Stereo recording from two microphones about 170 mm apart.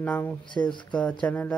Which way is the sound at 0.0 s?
10° left (ahead or behind).